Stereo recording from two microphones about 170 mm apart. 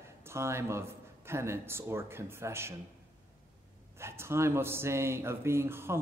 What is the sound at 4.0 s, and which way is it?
Speech, 15° right (ahead or behind).